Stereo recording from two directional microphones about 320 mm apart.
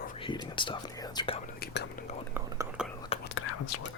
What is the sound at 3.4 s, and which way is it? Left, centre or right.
Whispering, left.